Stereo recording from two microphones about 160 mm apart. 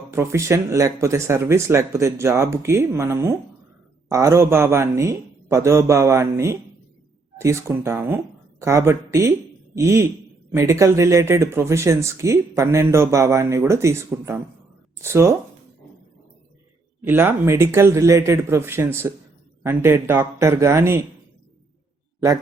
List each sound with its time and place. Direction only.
0.1 s speech: 15° right (ahead or behind)
17.0 s speech: 10° right (ahead or behind)